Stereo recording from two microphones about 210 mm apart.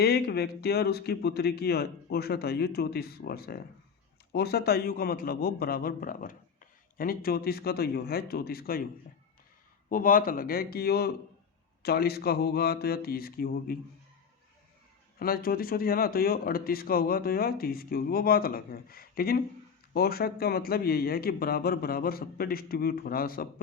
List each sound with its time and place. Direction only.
0.0 s a man's voice: 50° left (ahead or behind)
9.9 s a man's voice: 40° left (ahead or behind)
15.2 s a man's voice: 45° left (ahead or behind)